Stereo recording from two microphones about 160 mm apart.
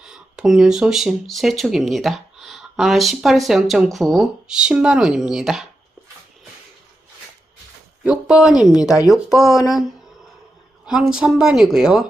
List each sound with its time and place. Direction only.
0.0 s speech: 5° right (ahead or behind)
8.0 s speech: 5° right (ahead or behind)
8.7 s speech: 20° left (ahead or behind)
9.0 s speech: centre (ahead or behind)
10.8 s speech: 5° right (ahead or behind)